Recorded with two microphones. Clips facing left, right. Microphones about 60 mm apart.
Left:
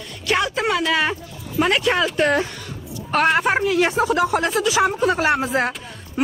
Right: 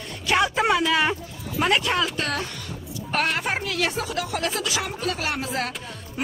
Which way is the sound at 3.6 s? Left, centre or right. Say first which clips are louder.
Left 8 dB; left.